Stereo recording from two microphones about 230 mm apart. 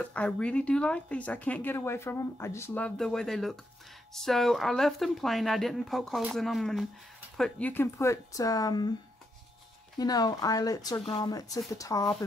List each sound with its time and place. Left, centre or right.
0.0 s speech: centre
9.9 s speech: centre